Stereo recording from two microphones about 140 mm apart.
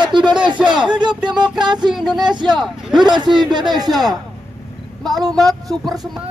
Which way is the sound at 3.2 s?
30° right (ahead or behind).